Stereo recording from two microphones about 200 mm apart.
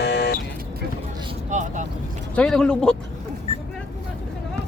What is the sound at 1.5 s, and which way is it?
Vehicle, 35° right (ahead or behind).